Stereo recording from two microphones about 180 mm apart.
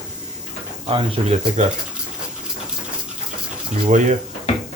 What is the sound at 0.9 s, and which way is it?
Speech, 30° right (ahead or behind).